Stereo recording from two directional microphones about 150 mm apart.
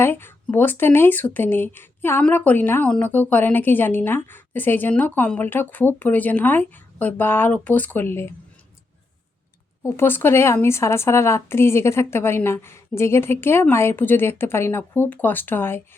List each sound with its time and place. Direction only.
0.0 s speech: 15° left (ahead or behind)
9.8 s speech: 15° left (ahead or behind)